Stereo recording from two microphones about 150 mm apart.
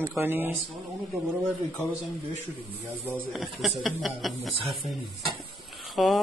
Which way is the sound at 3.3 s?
Centre (ahead or behind).